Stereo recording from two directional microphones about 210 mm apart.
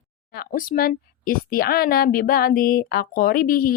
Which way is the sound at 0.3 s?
45° left (ahead or behind).